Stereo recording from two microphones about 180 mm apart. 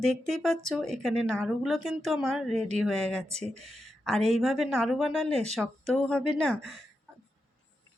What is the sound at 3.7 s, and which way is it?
Speech, centre (ahead or behind).